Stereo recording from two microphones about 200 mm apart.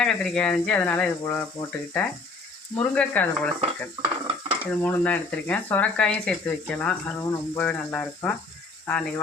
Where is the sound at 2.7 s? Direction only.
5° left (ahead or behind).